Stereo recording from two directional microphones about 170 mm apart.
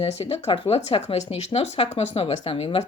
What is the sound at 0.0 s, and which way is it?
Speech, 35° left (ahead or behind).